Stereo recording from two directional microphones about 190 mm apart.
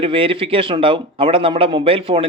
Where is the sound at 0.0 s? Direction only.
30° right (ahead or behind).